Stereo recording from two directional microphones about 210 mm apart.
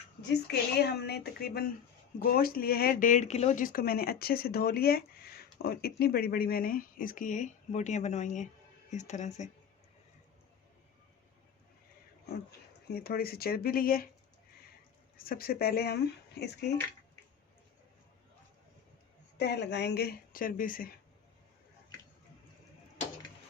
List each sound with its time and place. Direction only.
0.2 s speech: 50° left (ahead or behind); by 9.5 s 35° left (ahead or behind)
12.5 s speech: 45° left (ahead or behind)
15.2 s speech: 45° left (ahead or behind)
19.4 s speech: 55° left (ahead or behind)